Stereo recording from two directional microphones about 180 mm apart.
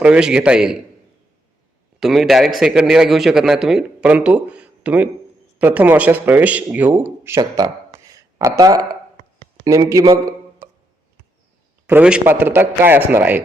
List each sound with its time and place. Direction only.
0.0 s a man's voice: 5° right (ahead or behind)
2.0 s a man's voice: centre (ahead or behind); by 10.2 s 20° right (ahead or behind)
11.9 s a man's voice: 5° right (ahead or behind)